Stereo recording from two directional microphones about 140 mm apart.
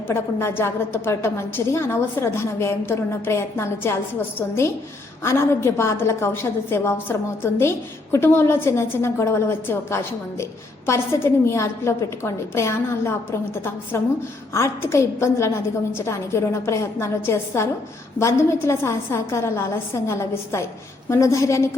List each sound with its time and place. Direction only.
0.1 s a woman's voice: 20° left (ahead or behind)